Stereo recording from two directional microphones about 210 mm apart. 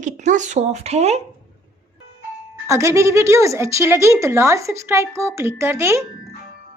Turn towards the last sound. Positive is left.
turn(degrees=-10)  # may be behind; listen again after turning